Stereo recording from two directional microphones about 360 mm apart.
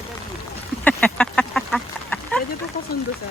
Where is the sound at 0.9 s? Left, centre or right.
Centre.